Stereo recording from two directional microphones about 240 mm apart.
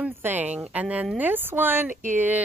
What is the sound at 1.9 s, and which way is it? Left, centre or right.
Speech, right.